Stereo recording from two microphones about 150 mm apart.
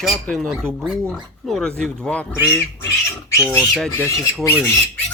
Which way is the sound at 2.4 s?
20° left (ahead or behind).